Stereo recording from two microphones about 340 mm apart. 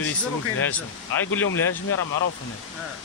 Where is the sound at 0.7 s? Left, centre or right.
Centre.